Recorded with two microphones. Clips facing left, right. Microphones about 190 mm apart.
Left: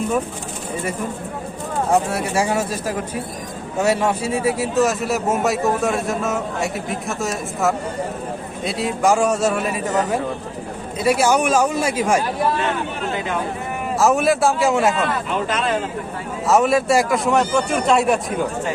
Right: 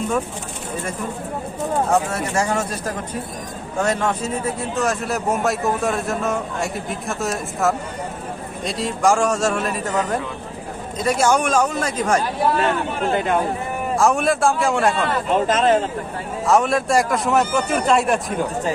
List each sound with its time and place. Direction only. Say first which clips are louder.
1.9 s speech: left 1 dB; 10° left (ahead or behind)
13.1 s speech: right 6 dB; 50° right (ahead or behind)
13.9 s speech: left 2 dB; centre (ahead or behind)
15.3 s speech: right 5 dB; 40° right (ahead or behind)
16.5 s speech: left 2 dB; centre (ahead or behind)